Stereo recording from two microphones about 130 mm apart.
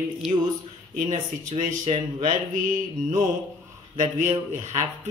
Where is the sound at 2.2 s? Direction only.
80° right.